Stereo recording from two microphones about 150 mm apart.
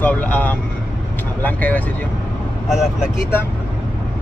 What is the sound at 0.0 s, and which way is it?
Speech, 10° left (ahead or behind).